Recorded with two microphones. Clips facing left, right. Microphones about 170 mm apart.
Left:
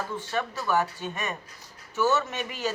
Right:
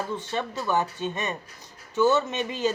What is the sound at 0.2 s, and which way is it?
Speech, 20° right (ahead or behind).